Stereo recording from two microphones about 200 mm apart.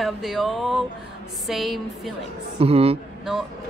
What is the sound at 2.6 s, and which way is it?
Speech, 30° right (ahead or behind).